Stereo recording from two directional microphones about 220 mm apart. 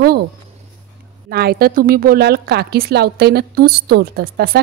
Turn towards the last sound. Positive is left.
turn(degrees=-45)  # may be behind; listen again after turning